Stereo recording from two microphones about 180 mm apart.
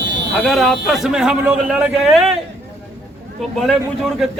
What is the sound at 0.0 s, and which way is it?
Buzzer, 80° right.